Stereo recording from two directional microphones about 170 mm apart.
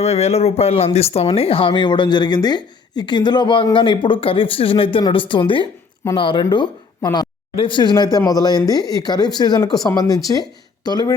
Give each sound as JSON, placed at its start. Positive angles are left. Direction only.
{"t": 0.0, "sound": "speech", "side_deg": 40}